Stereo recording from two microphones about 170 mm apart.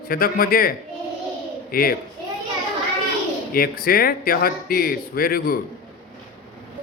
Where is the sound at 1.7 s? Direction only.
60° left (ahead or behind).